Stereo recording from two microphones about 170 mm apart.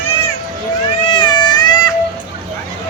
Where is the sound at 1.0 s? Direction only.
30° left (ahead or behind).